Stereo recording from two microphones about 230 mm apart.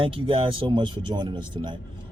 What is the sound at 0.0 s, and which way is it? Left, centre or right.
Speech, right.